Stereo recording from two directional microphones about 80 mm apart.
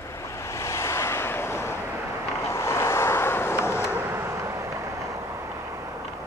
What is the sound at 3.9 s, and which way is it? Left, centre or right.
Vehicle, right.